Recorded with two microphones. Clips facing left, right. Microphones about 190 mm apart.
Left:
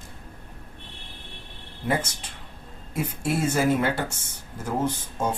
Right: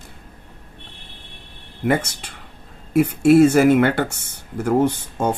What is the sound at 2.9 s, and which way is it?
Speech, 70° right (ahead or behind).